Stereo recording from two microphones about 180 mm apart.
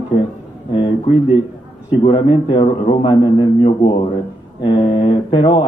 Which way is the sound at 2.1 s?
30° left (ahead or behind).